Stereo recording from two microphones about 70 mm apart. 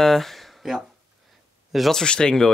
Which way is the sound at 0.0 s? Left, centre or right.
Centre.